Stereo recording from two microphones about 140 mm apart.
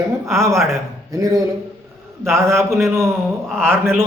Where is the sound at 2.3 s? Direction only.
20° right (ahead or behind).